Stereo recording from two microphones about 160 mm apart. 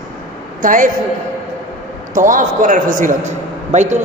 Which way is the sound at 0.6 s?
55° right (ahead or behind).